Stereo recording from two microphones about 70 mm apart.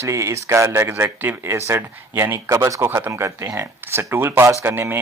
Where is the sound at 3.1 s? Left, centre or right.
Right.